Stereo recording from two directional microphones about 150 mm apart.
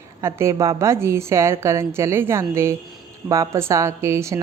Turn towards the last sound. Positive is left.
turn(degrees=-20)  # may be behind; listen again after turning